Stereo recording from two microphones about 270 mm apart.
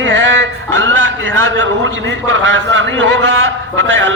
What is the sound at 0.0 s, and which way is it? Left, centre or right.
A man's voice, right.